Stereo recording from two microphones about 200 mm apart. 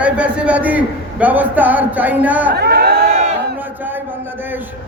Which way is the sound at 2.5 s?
50° right (ahead or behind).